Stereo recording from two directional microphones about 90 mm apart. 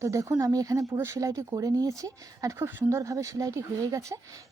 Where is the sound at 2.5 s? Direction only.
25° right (ahead or behind).